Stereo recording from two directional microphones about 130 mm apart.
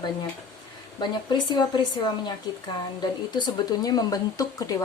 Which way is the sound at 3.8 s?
30° left (ahead or behind).